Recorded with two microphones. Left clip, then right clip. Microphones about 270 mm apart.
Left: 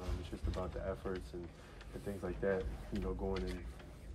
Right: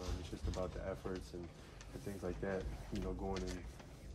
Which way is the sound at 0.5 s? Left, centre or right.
Centre.